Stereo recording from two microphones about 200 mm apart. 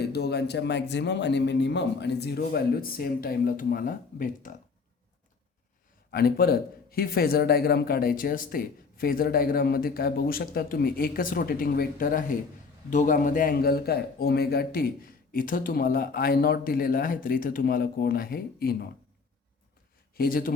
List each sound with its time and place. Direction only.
0.0 s speech: 55° left (ahead or behind)
6.1 s speech: 50° left (ahead or behind)
20.1 s speech: 45° left (ahead or behind)